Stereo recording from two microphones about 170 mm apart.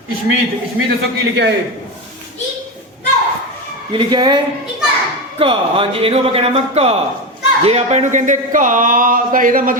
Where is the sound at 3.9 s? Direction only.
25° right (ahead or behind).